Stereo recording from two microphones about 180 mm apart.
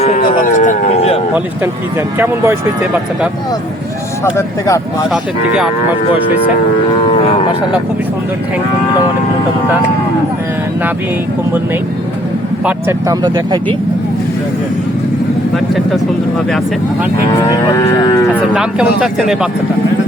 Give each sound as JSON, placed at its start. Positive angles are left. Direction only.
{"t": 0.0, "sound": "a sound", "side_deg": 45}
{"t": 2.1, "sound": "speech", "side_deg": -10}
{"t": 4.4, "sound": "speech", "side_deg": 20}
{"t": 5.1, "sound": "speech", "side_deg": -5}
{"t": 7.1, "sound": "speech", "side_deg": 30}
{"t": 13.1, "sound": "speech", "side_deg": -25}
{"t": 15.5, "sound": "speech", "side_deg": 0}
{"t": 17.5, "sound": "speech", "side_deg": 20}
{"t": 18.5, "sound": "speech", "side_deg": -5}